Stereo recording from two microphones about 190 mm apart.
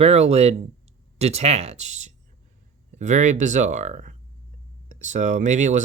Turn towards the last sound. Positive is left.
turn(degrees=-40)  # may be behind; listen again after turning